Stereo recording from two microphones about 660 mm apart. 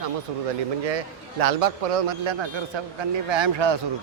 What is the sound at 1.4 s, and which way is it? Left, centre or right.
Speech, right.